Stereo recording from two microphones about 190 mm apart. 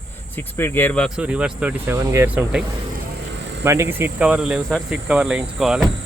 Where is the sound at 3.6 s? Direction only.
15° right (ahead or behind).